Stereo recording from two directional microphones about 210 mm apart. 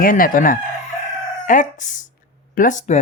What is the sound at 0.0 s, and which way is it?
Speech, 40° left (ahead or behind).